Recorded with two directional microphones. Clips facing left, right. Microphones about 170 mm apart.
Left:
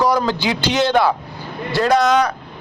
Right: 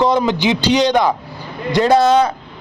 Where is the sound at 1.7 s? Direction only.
25° right (ahead or behind).